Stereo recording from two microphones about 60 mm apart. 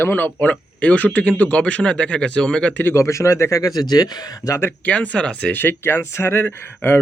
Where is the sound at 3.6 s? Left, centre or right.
Left.